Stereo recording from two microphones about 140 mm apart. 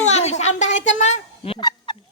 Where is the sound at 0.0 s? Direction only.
50° left (ahead or behind).